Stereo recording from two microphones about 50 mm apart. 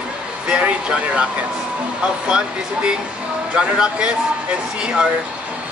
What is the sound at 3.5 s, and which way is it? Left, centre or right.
Speech, centre.